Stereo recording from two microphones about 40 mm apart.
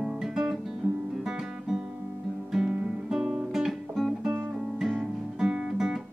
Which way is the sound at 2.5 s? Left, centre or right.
Centre.